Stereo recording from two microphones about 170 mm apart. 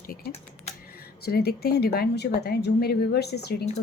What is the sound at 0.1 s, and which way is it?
Typing, 70° left (ahead or behind).